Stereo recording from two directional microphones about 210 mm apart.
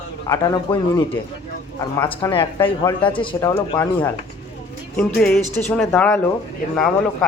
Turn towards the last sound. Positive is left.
turn(degrees=5)  # may be behind; listen again after turning